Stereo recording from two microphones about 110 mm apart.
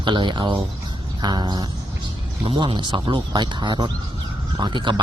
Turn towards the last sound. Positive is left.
turn(degrees=-45)  # may be behind; listen again after turning